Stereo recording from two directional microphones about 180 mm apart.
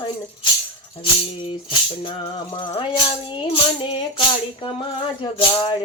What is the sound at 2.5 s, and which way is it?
Music, 25° left (ahead or behind).